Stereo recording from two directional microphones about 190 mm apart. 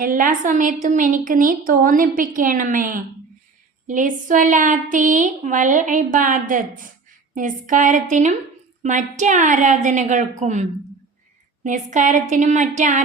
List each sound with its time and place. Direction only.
0.0 s a woman's voice: 45° right (ahead or behind)